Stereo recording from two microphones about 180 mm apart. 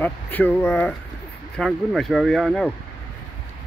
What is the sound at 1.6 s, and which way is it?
Speech, centre (ahead or behind).